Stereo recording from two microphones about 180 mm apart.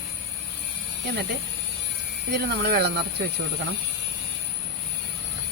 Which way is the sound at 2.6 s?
65° right (ahead or behind).